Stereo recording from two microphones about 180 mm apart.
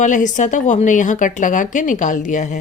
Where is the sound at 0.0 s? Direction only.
45° left (ahead or behind).